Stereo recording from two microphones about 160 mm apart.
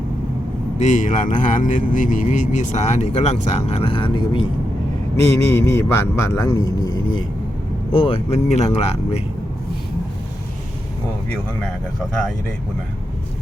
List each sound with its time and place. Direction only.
0.8 s speech: 50° left (ahead or behind); by 4.4 s 30° left (ahead or behind)
5.2 s speech: 15° left (ahead or behind); by 9.2 s 40° left (ahead or behind)